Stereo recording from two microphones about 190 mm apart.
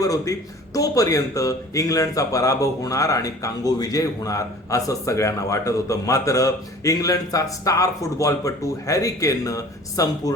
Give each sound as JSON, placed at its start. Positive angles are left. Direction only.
{"t": 0.0, "sound": "speech", "side_deg": 20}